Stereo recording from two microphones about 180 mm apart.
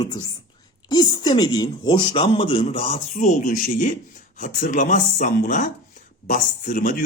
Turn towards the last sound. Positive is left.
turn(degrees=50)  # may be behind; listen again after turning